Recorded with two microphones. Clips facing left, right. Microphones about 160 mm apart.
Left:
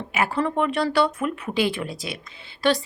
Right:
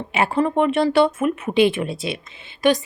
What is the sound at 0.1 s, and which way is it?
A woman's voice, 25° right (ahead or behind).